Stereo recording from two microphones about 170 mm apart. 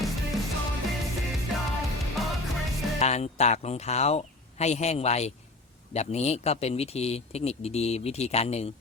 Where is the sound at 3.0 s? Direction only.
40° left (ahead or behind).